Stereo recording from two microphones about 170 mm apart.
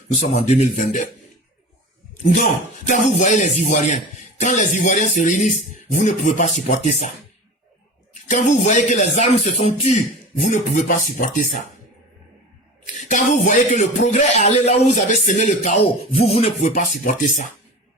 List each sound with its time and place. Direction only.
0.2 s speech: 40° left (ahead or behind)
2.8 s speech: 45° left (ahead or behind)
8.1 s speech: 45° left (ahead or behind)
12.8 s speech: 45° left (ahead or behind)